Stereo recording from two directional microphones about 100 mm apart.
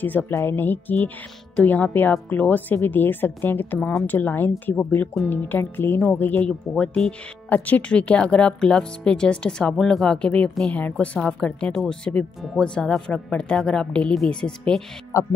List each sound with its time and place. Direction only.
0.0 s speech: 20° left (ahead or behind)
6.7 s speech: 5° left (ahead or behind)
10.8 s speech: 15° left (ahead or behind)